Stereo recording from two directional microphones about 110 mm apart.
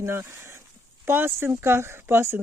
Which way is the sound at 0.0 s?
25° right (ahead or behind).